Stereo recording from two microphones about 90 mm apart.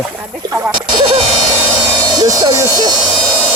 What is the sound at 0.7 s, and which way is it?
Speech, 60° right (ahead or behind).